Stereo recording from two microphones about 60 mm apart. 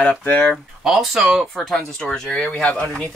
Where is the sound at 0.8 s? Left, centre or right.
Centre.